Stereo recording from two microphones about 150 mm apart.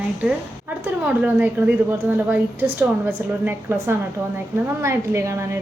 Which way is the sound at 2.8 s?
15° right (ahead or behind).